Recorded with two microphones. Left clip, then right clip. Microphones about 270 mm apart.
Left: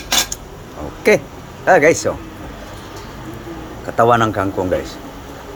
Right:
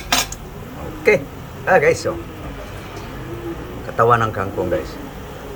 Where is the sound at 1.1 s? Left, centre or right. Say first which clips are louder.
Left 2 dB; left.